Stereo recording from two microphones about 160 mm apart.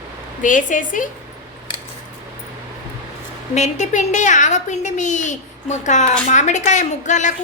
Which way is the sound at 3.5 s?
45° left (ahead or behind).